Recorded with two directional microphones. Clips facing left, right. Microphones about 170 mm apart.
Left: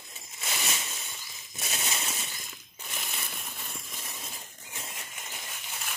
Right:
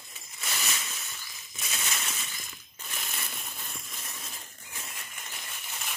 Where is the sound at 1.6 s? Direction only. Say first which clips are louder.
Left 2 dB; 25° left (ahead or behind).